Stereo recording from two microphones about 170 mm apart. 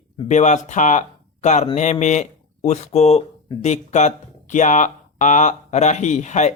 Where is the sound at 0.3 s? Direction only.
45° left (ahead or behind).